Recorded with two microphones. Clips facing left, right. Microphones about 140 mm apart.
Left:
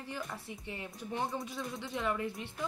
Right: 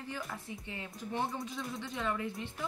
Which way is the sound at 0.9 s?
Centre (ahead or behind).